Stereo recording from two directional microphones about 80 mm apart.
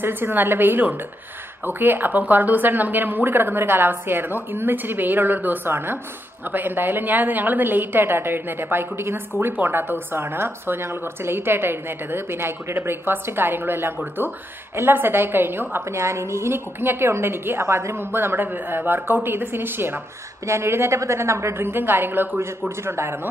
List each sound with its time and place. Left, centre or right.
0.0 s a woman's voice: right